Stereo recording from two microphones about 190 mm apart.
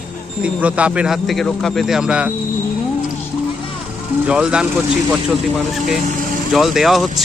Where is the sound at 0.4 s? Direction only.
5° right (ahead or behind).